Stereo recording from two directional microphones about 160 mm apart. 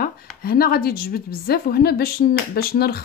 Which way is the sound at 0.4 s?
70° left (ahead or behind).